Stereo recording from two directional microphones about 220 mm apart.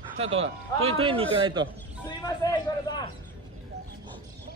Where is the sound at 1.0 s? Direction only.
25° right (ahead or behind).